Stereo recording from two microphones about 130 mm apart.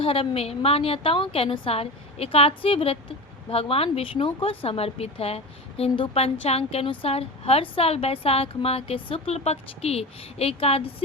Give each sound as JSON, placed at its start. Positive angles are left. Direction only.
{"t": 0.0, "sound": "speech", "side_deg": 45}